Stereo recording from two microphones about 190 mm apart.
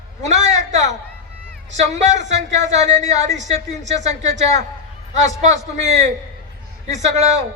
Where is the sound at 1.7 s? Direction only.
40° right (ahead or behind).